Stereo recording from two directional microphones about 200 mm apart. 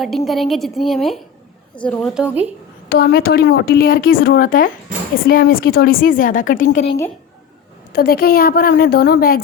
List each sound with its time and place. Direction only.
0.0 s a woman's voice: centre (ahead or behind)
2.9 s a woman's voice: 50° left (ahead or behind)
7.9 s a woman's voice: 50° left (ahead or behind)